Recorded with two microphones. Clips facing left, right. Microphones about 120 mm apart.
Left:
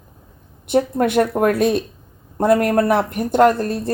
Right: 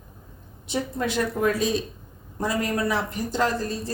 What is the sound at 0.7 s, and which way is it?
Speech, 55° left (ahead or behind).